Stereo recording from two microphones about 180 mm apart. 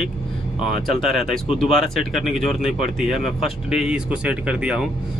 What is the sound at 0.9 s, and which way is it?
Speech, centre (ahead or behind).